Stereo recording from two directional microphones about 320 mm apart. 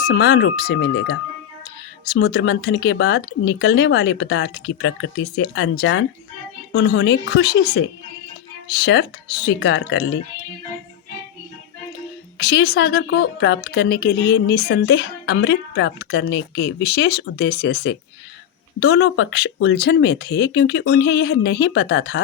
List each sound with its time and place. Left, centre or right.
0.0 s a woman's voice: left
12.4 s a woman's voice: left